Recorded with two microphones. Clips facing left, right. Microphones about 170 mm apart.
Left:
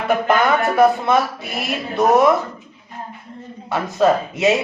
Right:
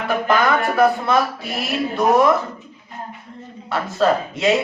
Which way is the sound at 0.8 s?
20° left (ahead or behind).